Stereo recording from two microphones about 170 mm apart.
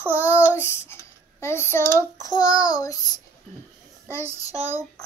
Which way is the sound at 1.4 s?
15° left (ahead or behind).